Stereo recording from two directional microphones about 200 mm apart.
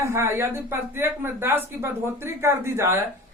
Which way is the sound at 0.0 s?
15° right (ahead or behind).